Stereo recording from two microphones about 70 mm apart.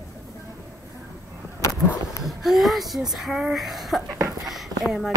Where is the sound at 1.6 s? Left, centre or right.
Left.